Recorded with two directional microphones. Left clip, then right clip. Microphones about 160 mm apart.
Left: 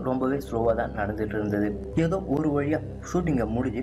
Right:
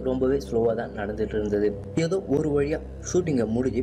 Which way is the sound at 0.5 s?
40° right (ahead or behind).